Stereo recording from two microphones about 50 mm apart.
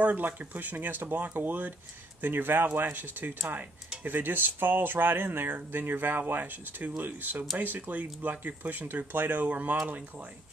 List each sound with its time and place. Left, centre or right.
0.0 s speech: right